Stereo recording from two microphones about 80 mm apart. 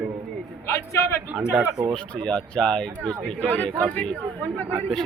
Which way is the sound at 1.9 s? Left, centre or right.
Centre.